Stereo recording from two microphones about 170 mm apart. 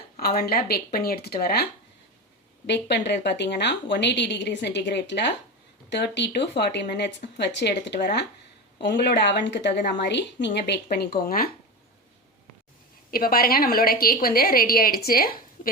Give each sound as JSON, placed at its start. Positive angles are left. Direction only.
{"t": 0.2, "sound": "a woman's voice", "side_deg": 65}
{"t": 2.6, "sound": "a woman's voice", "side_deg": 90}
{"t": 13.1, "sound": "a woman's voice", "side_deg": 60}